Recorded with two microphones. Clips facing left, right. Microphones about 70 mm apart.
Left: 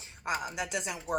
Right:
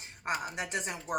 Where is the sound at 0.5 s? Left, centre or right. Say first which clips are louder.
Left 1 dB; right.